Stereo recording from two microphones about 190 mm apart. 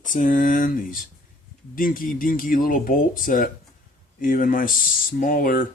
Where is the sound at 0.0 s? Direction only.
45° left (ahead or behind).